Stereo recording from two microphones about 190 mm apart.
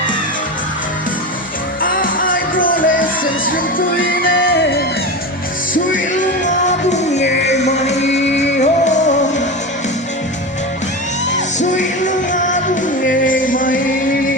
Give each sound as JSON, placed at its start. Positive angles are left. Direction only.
{"t": 1.8, "sound": "music", "side_deg": 45}
{"t": 6.4, "sound": "music", "side_deg": 40}
{"t": 11.8, "sound": "music", "side_deg": 40}